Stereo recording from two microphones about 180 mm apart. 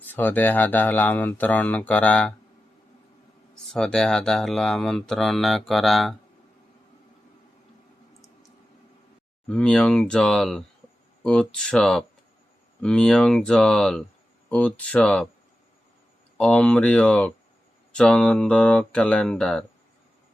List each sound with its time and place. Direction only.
0.0 s speech: 10° left (ahead or behind)
3.7 s speech: 5° left (ahead or behind)
9.5 s speech: 5° left (ahead or behind)
16.4 s speech: 5° left (ahead or behind)